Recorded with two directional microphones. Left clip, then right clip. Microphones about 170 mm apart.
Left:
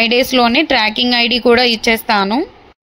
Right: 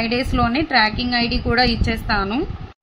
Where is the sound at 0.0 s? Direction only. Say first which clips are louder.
Left 9 dB; 30° left (ahead or behind).